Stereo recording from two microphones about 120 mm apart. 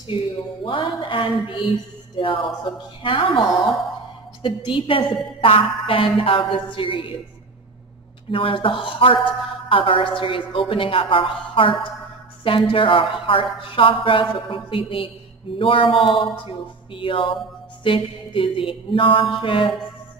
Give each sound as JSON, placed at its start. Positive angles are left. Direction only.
{"t": 0.7, "sound": "a woman's voice", "side_deg": 45}
{"t": 8.3, "sound": "a woman's voice", "side_deg": 45}